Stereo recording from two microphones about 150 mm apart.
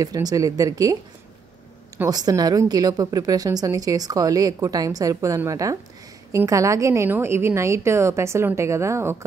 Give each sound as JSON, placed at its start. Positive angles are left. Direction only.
{"t": 0.0, "sound": "a woman's voice", "side_deg": -25}
{"t": 2.0, "sound": "a woman's voice", "side_deg": -25}